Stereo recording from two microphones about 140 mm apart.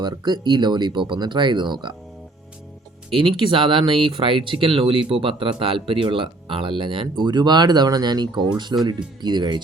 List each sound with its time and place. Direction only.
0.0 s speech: 30° right (ahead or behind)
3.1 s speech: 40° right (ahead or behind)